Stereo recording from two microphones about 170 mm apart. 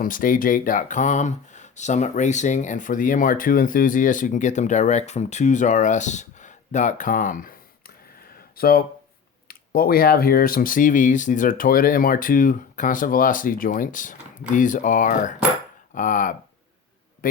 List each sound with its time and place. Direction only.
0.0 s speech: 55° left (ahead or behind)